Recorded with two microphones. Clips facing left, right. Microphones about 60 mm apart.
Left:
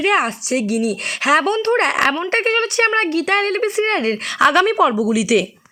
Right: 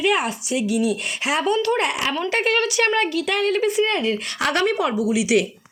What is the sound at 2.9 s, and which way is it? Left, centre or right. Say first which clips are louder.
Speech: left 4 dB; left.